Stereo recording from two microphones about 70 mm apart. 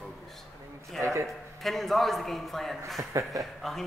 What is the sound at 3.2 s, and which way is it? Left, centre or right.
Speech, right.